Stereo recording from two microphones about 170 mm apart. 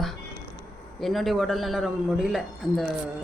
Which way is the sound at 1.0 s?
Centre (ahead or behind).